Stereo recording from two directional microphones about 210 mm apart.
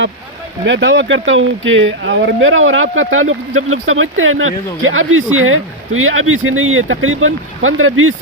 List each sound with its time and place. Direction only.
0.6 s speech: 60° right (ahead or behind); by 8.1 s 75° right (ahead or behind)